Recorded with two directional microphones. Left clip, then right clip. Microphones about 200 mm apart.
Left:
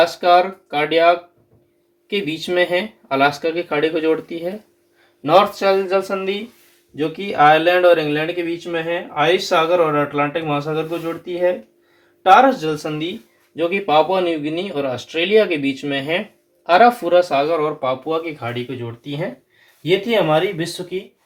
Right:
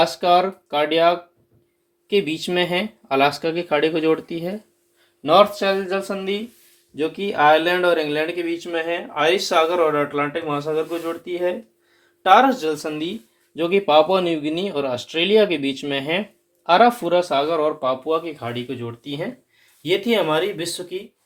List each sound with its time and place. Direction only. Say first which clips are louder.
0.0 s speech: left 3 dB; 45° right (ahead or behind)
5.2 s speech: left 1 dB; 30° right (ahead or behind)